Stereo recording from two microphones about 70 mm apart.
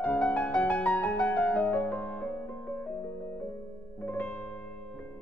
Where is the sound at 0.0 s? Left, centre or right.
Left.